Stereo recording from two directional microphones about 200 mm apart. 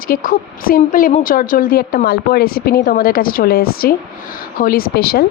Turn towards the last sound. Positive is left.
turn(degrees=50)  # may be behind; listen again after turning